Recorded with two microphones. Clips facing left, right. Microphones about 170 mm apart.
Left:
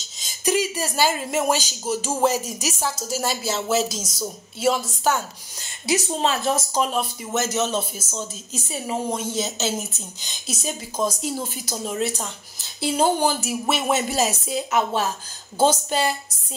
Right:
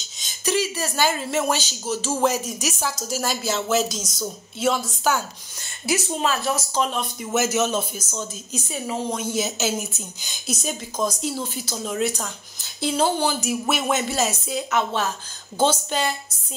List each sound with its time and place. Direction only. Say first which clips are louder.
0.5 s speech: left 1 dB; 15° left (ahead or behind)
5.9 s a woman's voice: left 1 dB; 25° left (ahead or behind)
6.7 s speech: left 1 dB; 5° left (ahead or behind)
7.3 s a woman's voice: right 2 dB; 5° right (ahead or behind)
11.3 s speech: even; 15° left (ahead or behind)
11.9 s a woman's voice: right 2 dB; 5° left (ahead or behind)
14.1 s speech: left 1 dB; 35° left (ahead or behind)